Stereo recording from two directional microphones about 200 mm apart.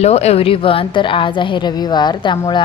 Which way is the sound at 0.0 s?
30° left (ahead or behind).